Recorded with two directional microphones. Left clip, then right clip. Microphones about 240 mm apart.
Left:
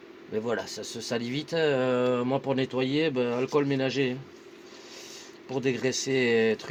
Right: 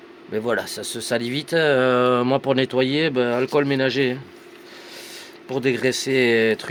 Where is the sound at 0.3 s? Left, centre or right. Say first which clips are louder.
Right 7 dB; right.